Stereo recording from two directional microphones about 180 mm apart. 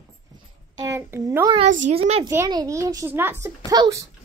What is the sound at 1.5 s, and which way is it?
Speech, 35° right (ahead or behind).